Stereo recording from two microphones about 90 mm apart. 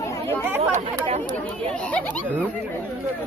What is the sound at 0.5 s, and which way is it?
Speech, 30° right (ahead or behind).